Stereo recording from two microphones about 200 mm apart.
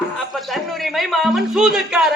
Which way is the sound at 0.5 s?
Centre (ahead or behind).